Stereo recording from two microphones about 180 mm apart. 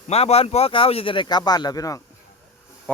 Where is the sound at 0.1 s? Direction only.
35° left (ahead or behind); by 2.0 s 20° left (ahead or behind).